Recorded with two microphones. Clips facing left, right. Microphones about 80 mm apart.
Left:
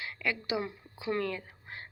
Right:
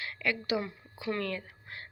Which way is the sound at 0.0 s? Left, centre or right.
Centre.